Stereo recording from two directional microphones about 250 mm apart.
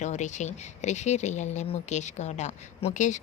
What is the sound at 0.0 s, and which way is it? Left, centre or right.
Speech, left.